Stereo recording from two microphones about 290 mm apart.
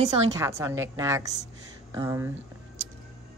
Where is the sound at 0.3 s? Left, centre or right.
Centre.